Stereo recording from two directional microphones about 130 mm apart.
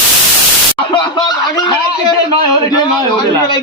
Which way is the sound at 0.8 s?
35° left (ahead or behind).